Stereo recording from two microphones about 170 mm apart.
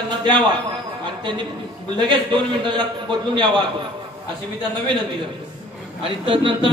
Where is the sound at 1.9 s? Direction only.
25° right (ahead or behind).